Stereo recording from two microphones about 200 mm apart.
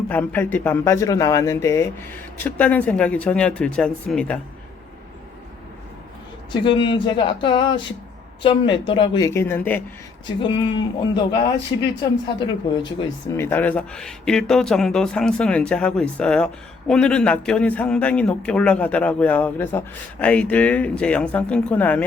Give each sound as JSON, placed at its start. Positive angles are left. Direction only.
{"t": 0.1, "sound": "a man's voice", "side_deg": 10}
{"t": 6.5, "sound": "speech", "side_deg": 25}
{"t": 10.2, "sound": "speech", "side_deg": 20}
{"t": 13.3, "sound": "a man's voice", "side_deg": 10}